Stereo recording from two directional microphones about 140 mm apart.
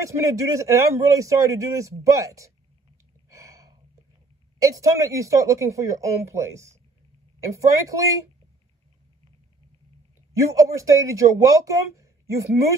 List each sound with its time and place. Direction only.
0.1 s a man's voice: 20° right (ahead or behind)
3.3 s a sound: 20° right (ahead or behind)
4.6 s a man's voice: 25° right (ahead or behind)
10.5 s a man's voice: 25° right (ahead or behind)